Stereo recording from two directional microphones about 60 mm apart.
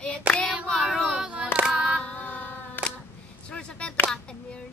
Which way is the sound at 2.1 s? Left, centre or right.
Left.